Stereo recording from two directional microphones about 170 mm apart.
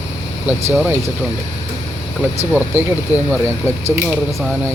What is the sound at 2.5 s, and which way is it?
Speech, 10° right (ahead or behind).